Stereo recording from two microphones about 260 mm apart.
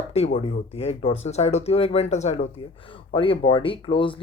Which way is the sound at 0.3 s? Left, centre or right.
Left.